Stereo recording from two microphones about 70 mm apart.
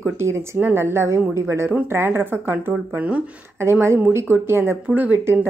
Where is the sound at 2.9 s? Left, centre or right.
Right.